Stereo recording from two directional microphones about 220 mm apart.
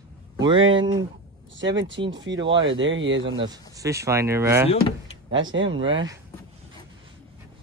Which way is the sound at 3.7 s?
15° right (ahead or behind).